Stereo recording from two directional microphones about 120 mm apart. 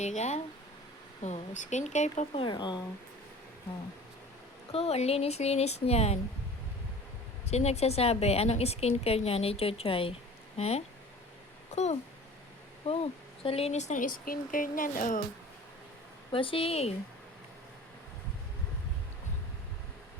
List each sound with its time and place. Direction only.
0.0 s speech: 70° left (ahead or behind)
2.3 s speech: 40° left (ahead or behind)
4.7 s a woman's voice: 60° left (ahead or behind)
7.4 s a woman's voice: 60° left (ahead or behind)
10.6 s a woman's voice: 65° left (ahead or behind)
12.9 s a woman's voice: 55° left (ahead or behind); by 15.2 s 90° left
16.3 s speech: 45° left (ahead or behind)